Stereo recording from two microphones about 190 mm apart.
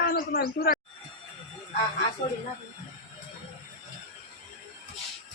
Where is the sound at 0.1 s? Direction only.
55° left (ahead or behind).